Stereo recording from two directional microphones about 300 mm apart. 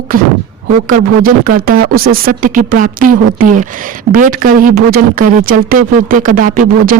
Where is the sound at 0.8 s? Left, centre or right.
Right.